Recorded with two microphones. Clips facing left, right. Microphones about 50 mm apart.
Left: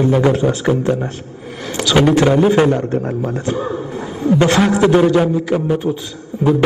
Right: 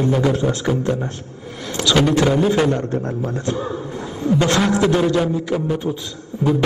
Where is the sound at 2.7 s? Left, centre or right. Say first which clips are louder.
Left 4 dB; centre.